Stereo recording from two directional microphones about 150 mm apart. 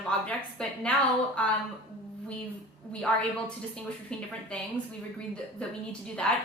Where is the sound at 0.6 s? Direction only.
5° left (ahead or behind).